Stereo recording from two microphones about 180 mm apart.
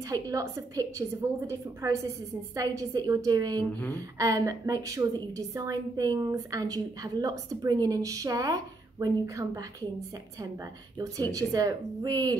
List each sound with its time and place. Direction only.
0.1 s a woman's voice: 20° right (ahead or behind)